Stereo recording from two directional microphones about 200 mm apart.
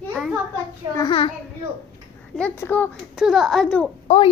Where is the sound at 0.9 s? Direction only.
25° left (ahead or behind).